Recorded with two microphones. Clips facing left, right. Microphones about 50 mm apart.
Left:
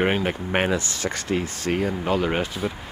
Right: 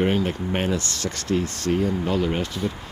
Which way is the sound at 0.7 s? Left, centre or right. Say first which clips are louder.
Left 2 dB; centre.